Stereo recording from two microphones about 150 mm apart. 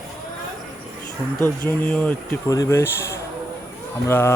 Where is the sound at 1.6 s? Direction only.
10° left (ahead or behind).